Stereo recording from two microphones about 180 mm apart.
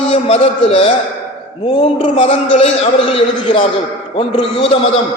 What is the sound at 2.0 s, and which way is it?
Speech, 35° left (ahead or behind).